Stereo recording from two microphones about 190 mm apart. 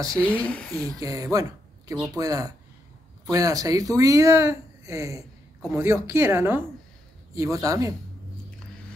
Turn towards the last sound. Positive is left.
turn(degrees=-15)  # may be behind; listen again after turning